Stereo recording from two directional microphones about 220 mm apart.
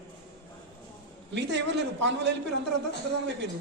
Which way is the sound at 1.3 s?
50° right (ahead or behind).